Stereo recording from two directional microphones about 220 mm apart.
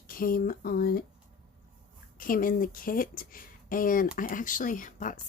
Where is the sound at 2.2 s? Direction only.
40° left (ahead or behind).